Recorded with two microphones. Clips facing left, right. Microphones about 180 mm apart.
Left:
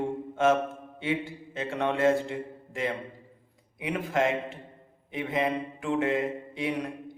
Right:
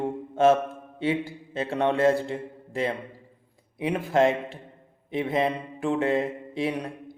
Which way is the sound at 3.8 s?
30° right (ahead or behind).